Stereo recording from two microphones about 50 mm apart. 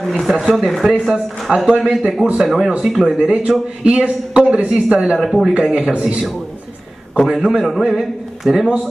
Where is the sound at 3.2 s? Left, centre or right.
Right.